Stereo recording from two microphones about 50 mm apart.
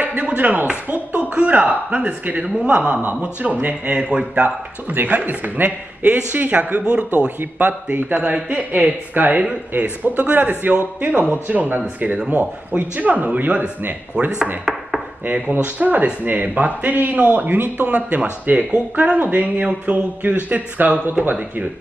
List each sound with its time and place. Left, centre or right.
0.0 s a man's voice: right
6.8 s speech: right
7.3 s a man's voice: right
14.6 s chopping: centre
15.6 s a man's voice: right